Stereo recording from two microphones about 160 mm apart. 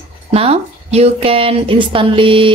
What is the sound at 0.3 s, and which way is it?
A woman's voice, 40° right (ahead or behind).